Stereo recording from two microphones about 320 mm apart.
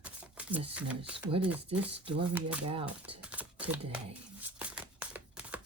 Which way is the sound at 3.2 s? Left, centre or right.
Centre.